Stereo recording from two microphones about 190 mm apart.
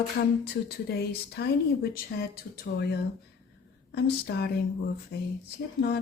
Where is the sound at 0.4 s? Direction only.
55° left (ahead or behind).